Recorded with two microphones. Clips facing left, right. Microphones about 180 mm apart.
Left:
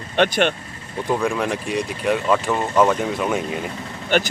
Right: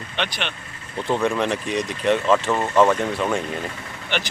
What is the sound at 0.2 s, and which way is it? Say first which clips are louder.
Speech: left 10 dB; 50° left (ahead or behind).